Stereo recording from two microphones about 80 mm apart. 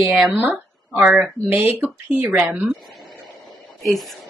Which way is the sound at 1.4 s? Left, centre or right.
Right.